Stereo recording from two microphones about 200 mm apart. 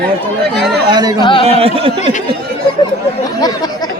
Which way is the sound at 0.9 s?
20° right (ahead or behind).